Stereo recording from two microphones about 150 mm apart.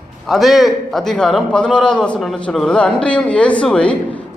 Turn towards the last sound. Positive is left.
turn(degrees=10)  # may be behind; listen again after turning